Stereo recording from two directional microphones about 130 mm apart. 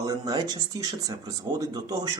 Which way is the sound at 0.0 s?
30° right (ahead or behind).